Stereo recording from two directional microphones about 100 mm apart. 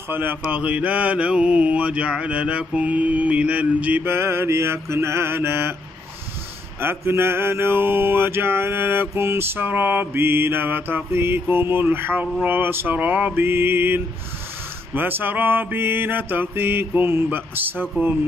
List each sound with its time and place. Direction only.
0.1 s mantra: 20° right (ahead or behind)
6.8 s mantra: 25° right (ahead or behind)